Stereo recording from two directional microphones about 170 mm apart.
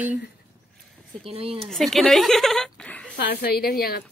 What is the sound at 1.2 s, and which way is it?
Speech, 35° right (ahead or behind).